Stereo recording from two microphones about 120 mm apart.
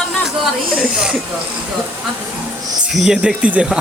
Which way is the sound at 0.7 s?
5° right (ahead or behind).